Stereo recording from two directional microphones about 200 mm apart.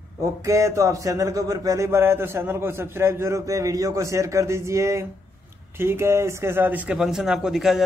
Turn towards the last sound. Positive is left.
turn(degrees=0)  # may be behind; listen again after turning